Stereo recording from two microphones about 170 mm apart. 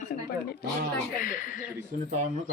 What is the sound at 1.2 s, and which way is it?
Speech, 50° left (ahead or behind).